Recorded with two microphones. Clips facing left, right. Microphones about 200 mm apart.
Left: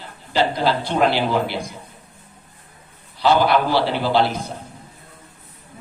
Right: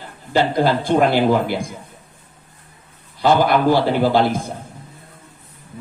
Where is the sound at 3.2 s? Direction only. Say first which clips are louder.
Right 2 dB; 50° right (ahead or behind).